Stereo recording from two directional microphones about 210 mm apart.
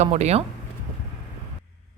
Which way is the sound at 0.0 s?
30° right (ahead or behind).